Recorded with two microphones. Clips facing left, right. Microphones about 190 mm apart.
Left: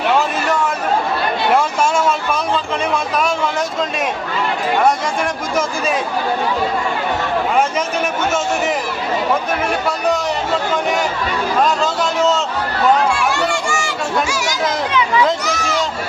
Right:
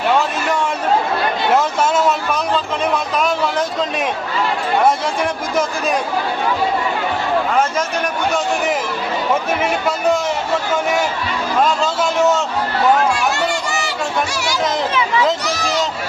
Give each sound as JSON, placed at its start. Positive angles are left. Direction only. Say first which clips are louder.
{"t": 13.1, "sound": "chatter", "louder": "left 1 dB", "side_deg": -40}
{"t": 15.4, "sound": "run", "louder": "even", "side_deg": -35}